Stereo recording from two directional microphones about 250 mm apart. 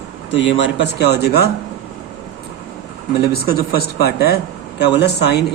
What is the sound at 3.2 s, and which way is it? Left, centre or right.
Speech, left.